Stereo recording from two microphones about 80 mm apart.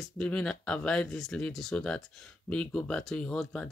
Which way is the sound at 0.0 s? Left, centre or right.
Centre.